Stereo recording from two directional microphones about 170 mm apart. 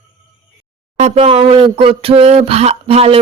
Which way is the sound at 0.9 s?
40° right (ahead or behind).